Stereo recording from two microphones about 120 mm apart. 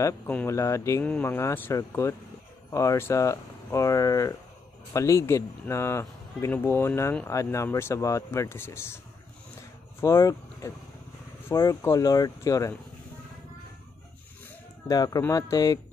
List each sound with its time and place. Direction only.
0.5 s speech: 25° left (ahead or behind)
1.0 s speech: 15° left (ahead or behind)
9.6 s a sound: 25° left (ahead or behind)
11.4 s speech: 20° left (ahead or behind)
14.9 s speech: 30° left (ahead or behind)